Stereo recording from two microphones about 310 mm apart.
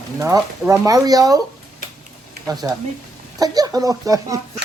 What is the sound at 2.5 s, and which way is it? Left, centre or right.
Speech, centre.